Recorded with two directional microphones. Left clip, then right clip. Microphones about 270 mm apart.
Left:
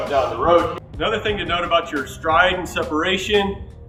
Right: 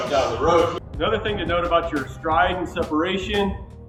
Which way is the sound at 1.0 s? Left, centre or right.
Centre.